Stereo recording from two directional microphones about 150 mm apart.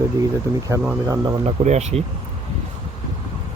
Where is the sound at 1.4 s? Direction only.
50° right (ahead or behind).